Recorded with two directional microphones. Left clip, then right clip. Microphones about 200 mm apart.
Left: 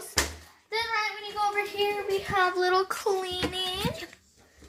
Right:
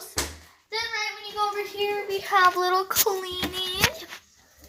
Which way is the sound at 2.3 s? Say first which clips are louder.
Right 7 dB; 35° right (ahead or behind).